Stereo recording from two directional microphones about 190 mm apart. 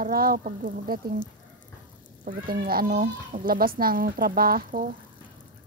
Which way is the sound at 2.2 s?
50° right (ahead or behind).